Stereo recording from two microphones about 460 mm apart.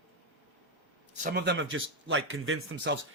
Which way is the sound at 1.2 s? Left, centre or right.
Centre.